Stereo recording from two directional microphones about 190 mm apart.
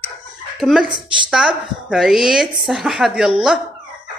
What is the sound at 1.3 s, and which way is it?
A woman's voice, 5° right (ahead or behind).